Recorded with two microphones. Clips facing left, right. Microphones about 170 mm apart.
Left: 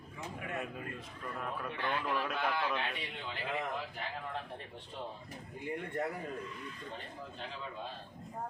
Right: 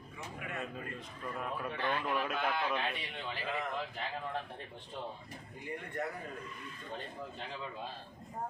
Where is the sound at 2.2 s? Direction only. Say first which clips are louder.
Even; centre (ahead or behind).